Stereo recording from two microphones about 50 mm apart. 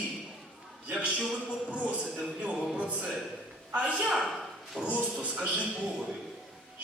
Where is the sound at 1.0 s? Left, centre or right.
Right.